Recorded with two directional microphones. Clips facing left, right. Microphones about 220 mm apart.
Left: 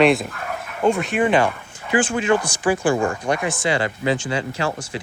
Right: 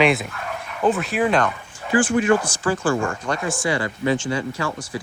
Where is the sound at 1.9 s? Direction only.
25° left (ahead or behind).